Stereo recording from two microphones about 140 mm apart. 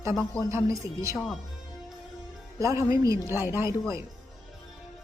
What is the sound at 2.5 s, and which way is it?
A woman's voice, 20° right (ahead or behind).